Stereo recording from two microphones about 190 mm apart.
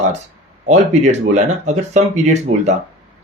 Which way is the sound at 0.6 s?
35° right (ahead or behind).